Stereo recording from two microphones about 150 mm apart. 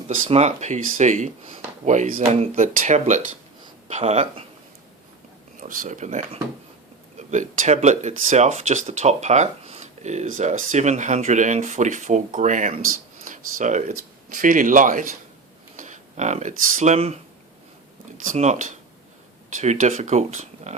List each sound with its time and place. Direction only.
0.3 s speech: 50° right (ahead or behind)
5.5 s speech: 65° right (ahead or behind); by 17.2 s 50° right (ahead or behind)
18.2 s speech: 55° right (ahead or behind)